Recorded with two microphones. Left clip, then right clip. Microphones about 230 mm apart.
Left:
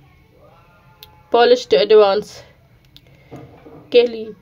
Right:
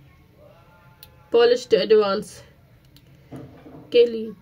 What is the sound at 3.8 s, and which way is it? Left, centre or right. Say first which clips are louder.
Speech: left 3 dB; left.